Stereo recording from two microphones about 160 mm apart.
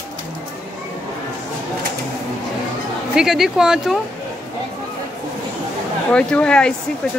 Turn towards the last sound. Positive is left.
turn(degrees=5)  # may be behind; listen again after turning